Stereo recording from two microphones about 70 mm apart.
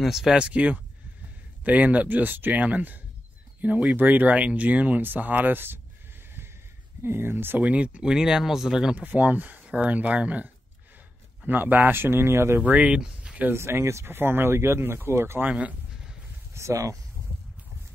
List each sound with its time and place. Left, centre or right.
0.0 s speech: centre; by 5.8 s right
7.0 s speech: right
7.6 s speech: centre
8.9 s speech: right
12.6 s speech: right
13.5 s speech: right
15.4 s speech: right
16.5 s speech: right